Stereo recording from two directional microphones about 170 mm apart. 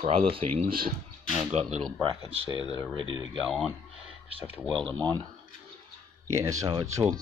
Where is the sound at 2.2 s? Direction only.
30° right (ahead or behind).